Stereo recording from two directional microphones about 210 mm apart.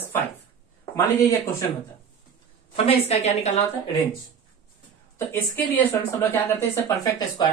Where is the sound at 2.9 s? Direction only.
30° left (ahead or behind).